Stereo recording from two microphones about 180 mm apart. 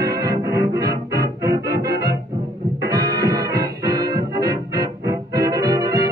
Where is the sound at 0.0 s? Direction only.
20° right (ahead or behind).